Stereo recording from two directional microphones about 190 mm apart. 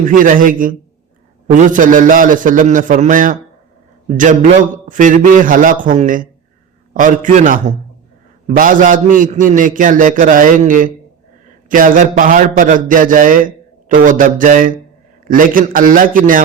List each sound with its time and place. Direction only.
0.0 s a man's voice: 45° right (ahead or behind)